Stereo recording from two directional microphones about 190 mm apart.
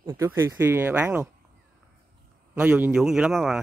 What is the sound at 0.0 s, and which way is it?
Speech, 15° right (ahead or behind).